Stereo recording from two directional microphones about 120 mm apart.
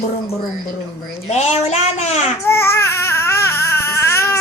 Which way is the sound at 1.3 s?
65° left (ahead or behind).